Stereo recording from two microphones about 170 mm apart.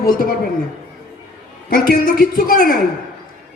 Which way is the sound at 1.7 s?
60° left (ahead or behind).